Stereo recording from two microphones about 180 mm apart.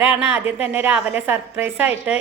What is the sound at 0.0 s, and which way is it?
A woman's voice, 10° right (ahead or behind).